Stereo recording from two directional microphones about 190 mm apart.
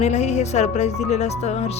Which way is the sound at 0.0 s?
35° left (ahead or behind).